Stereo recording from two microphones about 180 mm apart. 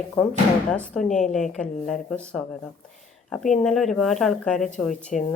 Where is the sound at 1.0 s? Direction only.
45° left (ahead or behind).